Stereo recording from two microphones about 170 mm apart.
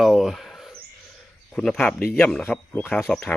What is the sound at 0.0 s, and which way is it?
Bird, centre (ahead or behind).